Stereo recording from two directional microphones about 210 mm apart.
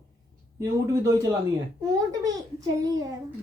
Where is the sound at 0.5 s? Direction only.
15° right (ahead or behind).